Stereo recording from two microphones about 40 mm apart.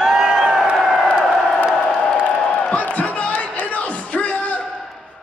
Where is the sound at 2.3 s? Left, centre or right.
Left.